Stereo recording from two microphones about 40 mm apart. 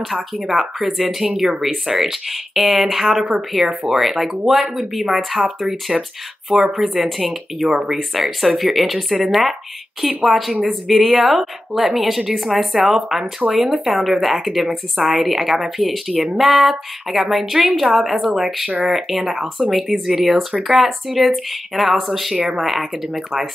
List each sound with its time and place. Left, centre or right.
0.0 s speech: centre
1.2 s speech: centre
7.7 s speech: centre